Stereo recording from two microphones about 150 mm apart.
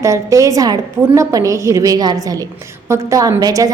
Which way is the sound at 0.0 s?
20° right (ahead or behind).